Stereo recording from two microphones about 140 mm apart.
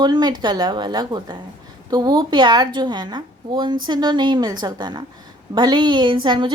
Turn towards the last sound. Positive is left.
turn(degrees=-35)  # may be behind; listen again after turning